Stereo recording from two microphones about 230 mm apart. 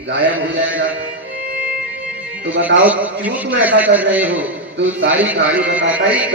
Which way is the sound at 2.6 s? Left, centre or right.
Right.